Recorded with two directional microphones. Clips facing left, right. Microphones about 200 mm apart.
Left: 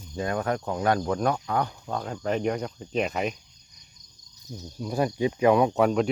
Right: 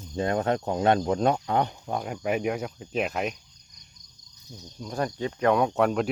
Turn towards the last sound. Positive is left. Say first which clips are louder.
# left 2 dB
turn(degrees=0)  # may be behind; listen again after turning